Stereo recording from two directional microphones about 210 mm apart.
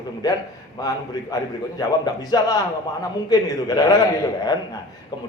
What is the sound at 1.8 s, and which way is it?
A man's voice, 20° left (ahead or behind).